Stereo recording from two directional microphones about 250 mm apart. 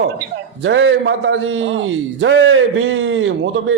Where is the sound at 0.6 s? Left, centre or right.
Right.